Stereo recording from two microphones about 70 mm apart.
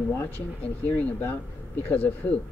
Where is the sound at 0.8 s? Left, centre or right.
Left.